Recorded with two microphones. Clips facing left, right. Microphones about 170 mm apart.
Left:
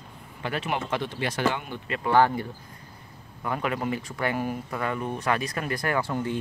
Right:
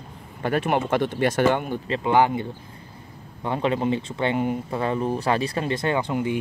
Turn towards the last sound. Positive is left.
turn(degrees=-15)  # may be behind; listen again after turning